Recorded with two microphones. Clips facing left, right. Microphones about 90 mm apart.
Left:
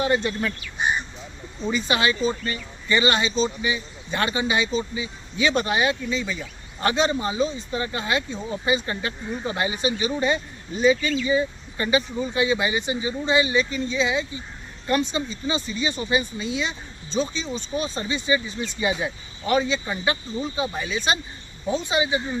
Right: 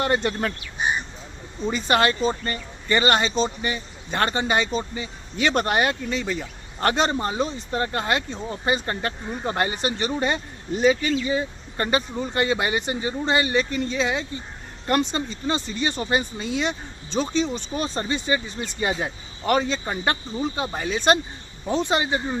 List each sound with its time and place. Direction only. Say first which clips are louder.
0.0 s speech: even; 55° right (ahead or behind)
1.7 s speech: right 2 dB; 50° right (ahead or behind)